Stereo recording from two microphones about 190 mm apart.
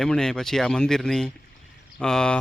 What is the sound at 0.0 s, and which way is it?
Speech, 5° left (ahead or behind).